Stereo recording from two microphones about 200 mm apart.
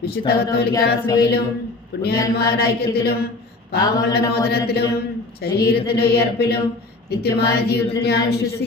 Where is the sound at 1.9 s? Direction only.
55° left (ahead or behind).